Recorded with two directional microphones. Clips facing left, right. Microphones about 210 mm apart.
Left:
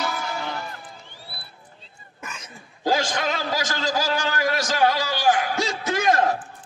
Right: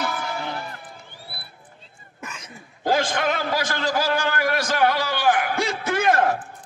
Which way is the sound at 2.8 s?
55° right (ahead or behind).